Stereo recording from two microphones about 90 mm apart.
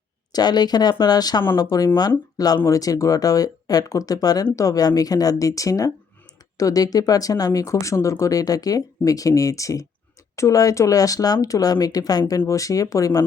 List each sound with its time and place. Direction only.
0.3 s speech: 50° left (ahead or behind)